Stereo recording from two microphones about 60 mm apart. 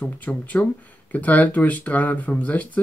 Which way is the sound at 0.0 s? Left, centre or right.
Left.